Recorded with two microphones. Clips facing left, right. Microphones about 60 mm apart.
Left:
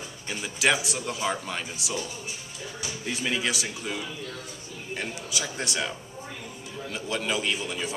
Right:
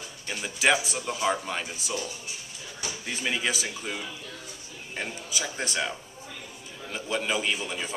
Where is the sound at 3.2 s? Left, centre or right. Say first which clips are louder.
Even; centre.